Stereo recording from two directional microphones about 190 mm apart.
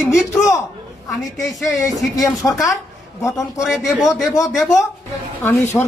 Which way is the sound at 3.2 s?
15° left (ahead or behind).